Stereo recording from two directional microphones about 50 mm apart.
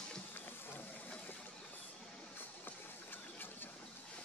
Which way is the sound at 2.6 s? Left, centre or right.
Left.